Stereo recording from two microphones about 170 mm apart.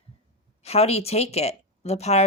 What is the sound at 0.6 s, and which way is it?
Speech, 35° left (ahead or behind).